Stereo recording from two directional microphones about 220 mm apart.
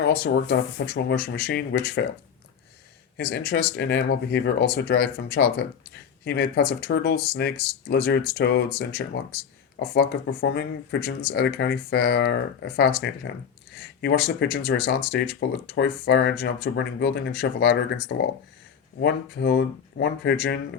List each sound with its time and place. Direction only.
0.0 s speech: 50° left (ahead or behind)
3.2 s speech: 45° left (ahead or behind)
14.0 s speech: 45° left (ahead or behind)